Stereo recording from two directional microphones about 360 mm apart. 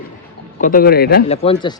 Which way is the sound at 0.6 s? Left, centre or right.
Left.